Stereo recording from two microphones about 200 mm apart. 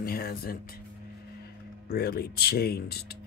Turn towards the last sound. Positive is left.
turn(degrees=50)  # may be behind; listen again after turning